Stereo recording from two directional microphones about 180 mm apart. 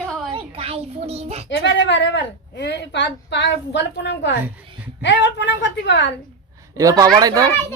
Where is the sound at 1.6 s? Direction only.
75° left (ahead or behind).